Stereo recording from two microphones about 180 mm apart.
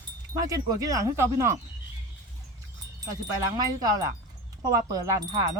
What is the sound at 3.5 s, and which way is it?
Speech, 20° right (ahead or behind).